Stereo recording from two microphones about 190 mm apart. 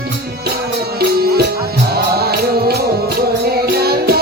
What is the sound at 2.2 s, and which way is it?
Music, 55° right (ahead or behind).